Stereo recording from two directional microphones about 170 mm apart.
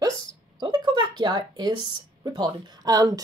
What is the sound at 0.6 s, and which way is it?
Speech, 25° right (ahead or behind).